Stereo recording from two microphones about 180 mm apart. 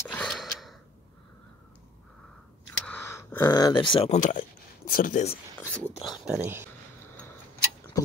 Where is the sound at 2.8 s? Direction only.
10° left (ahead or behind); by 4.1 s 30° left (ahead or behind).